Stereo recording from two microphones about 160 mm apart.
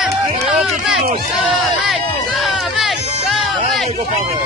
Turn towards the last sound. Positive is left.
turn(degrees=0)  # may be behind; listen again after turning